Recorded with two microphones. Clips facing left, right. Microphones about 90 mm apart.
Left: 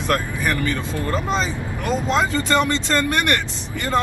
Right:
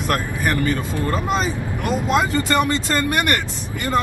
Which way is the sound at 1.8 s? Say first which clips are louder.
Even; 25° left (ahead or behind).